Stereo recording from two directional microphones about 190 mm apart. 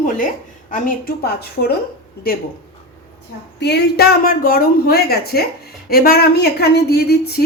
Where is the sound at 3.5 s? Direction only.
60° left (ahead or behind).